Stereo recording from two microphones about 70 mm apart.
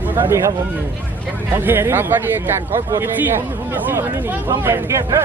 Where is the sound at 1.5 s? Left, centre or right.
Right.